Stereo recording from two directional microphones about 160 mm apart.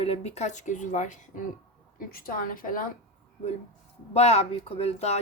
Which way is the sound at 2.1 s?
65° left (ahead or behind).